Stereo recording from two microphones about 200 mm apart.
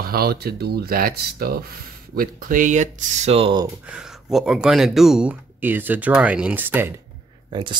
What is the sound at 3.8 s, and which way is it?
Speech, 5° right (ahead or behind).